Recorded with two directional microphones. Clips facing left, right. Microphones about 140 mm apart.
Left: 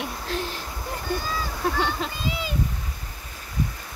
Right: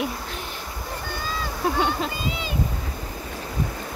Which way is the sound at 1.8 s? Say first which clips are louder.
Right 2 dB; 5° right (ahead or behind).